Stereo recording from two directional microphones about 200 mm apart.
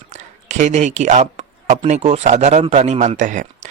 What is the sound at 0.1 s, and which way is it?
Speech, 35° right (ahead or behind).